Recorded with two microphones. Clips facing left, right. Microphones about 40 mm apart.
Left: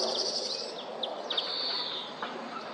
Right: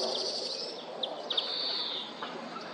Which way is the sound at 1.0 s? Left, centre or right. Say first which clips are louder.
Even; centre.